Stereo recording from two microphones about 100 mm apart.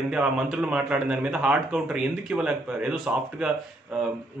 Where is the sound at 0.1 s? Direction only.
10° right (ahead or behind).